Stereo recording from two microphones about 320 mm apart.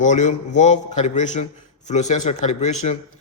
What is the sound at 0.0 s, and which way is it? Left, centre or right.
A man's voice, left.